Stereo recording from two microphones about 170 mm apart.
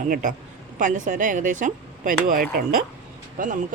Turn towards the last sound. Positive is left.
turn(degrees=-50)  # may be behind; listen again after turning